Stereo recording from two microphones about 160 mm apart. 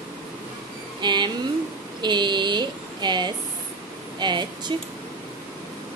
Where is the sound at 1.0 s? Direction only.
30° right (ahead or behind).